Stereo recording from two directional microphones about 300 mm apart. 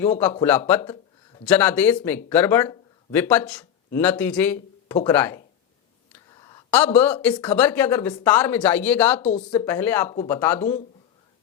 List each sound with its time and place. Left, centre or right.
0.0 s speech: centre
1.5 s speech: centre
6.4 s speech: centre
10.6 s speech: left